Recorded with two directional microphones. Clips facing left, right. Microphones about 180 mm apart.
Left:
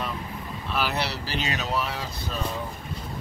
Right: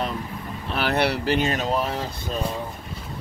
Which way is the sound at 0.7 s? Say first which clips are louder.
Right 6 dB; 55° right (ahead or behind).